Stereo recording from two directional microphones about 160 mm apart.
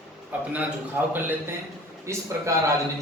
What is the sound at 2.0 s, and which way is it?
Speech, 20° right (ahead or behind).